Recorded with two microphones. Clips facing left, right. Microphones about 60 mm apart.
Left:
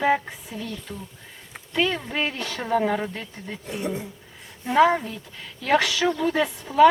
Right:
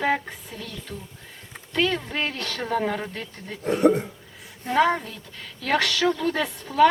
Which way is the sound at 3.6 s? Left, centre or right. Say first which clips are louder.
Right 11 dB; right.